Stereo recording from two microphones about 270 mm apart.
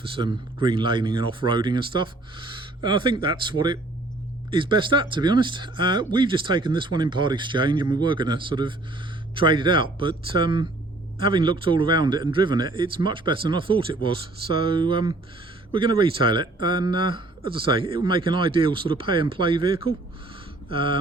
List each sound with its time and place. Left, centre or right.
0.2 s a man's voice: centre